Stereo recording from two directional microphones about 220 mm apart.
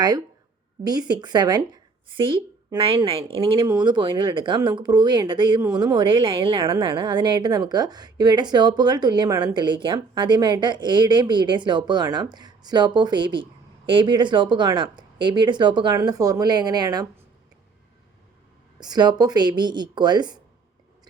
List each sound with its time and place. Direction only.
0.9 s speech: 20° right (ahead or behind)
18.8 s speech: 20° right (ahead or behind)